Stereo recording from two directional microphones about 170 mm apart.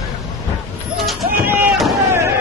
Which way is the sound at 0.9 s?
Centre (ahead or behind).